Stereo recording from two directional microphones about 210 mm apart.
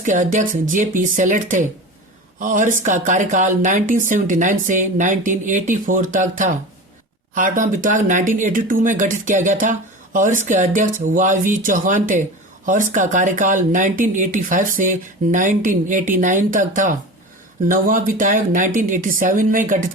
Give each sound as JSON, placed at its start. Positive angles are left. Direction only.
{"t": 0.0, "sound": "speech", "side_deg": -40}